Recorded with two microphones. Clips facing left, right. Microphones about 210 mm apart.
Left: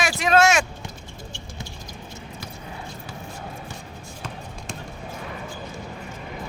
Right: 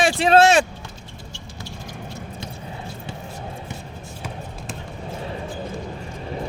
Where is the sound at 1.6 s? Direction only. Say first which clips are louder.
Right 4 dB; 45° left (ahead or behind).